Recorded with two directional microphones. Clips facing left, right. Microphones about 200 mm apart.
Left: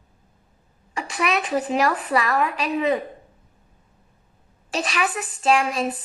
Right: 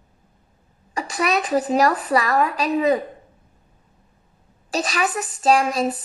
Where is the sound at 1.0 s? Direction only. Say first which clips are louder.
Right 2 dB; 40° right (ahead or behind).